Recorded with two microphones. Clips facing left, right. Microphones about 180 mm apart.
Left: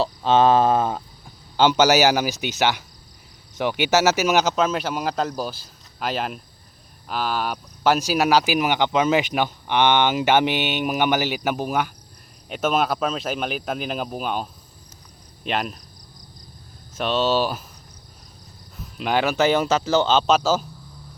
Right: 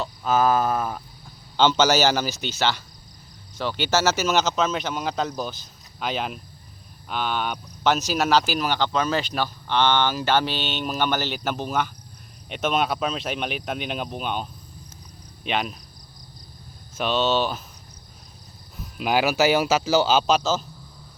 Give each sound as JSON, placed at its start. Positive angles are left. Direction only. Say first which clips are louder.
{"t": 0.0, "sound": "a sound", "louder": "left 4 dB", "side_deg": 30}
{"t": 1.5, "sound": "speech", "louder": "left 2 dB", "side_deg": 10}
{"t": 15.4, "sound": "speech", "louder": "left 1 dB", "side_deg": 0}
{"t": 17.0, "sound": "speech", "louder": "left 1 dB", "side_deg": 0}
{"t": 18.8, "sound": "speech", "louder": "even", "side_deg": -5}